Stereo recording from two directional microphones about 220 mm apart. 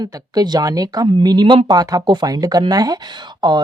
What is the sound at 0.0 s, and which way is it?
Speech, 20° right (ahead or behind).